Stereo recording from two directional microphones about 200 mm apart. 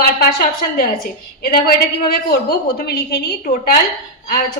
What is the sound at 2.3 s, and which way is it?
Speech, 50° left (ahead or behind).